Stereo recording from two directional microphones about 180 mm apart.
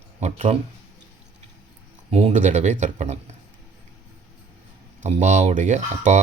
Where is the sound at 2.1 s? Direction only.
40° right (ahead or behind).